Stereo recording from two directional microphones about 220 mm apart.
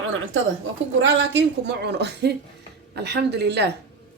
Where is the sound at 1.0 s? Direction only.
55° right (ahead or behind).